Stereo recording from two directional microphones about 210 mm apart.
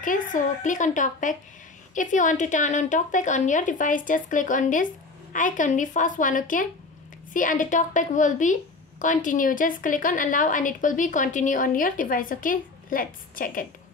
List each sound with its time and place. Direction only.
0.0 s a woman's voice: 40° left (ahead or behind)